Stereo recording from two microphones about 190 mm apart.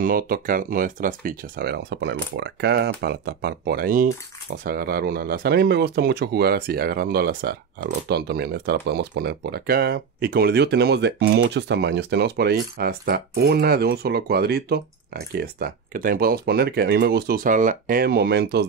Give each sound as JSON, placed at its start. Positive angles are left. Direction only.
{"t": 0.0, "sound": "speech", "side_deg": -50}